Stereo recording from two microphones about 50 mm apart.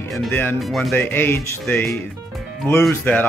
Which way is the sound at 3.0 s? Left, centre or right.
Left.